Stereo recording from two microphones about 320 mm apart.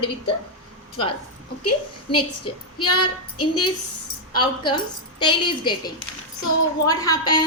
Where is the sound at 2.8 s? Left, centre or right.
Left.